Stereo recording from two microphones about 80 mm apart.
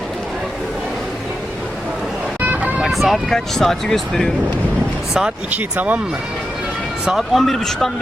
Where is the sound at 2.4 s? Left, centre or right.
Centre.